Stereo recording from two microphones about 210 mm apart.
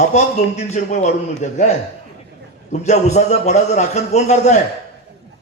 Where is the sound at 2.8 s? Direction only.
30° left (ahead or behind).